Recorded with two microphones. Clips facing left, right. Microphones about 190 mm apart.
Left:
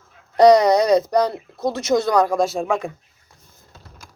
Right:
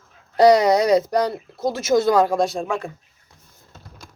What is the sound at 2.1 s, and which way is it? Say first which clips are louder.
Speech: even; 25° right (ahead or behind).